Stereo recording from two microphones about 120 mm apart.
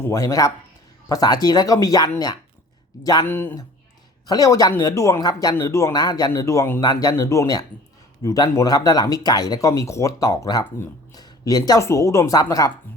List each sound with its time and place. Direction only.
0.0 s speech: 25° left (ahead or behind)
3.2 s speech: 15° left (ahead or behind)
4.3 s speech: 30° left (ahead or behind)